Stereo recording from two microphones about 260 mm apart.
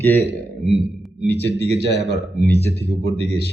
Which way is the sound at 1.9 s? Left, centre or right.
Right.